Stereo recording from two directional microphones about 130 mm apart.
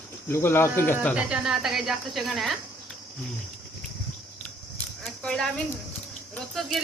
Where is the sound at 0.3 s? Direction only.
20° left (ahead or behind).